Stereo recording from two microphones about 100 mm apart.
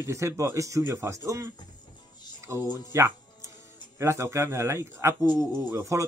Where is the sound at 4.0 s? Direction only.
30° right (ahead or behind).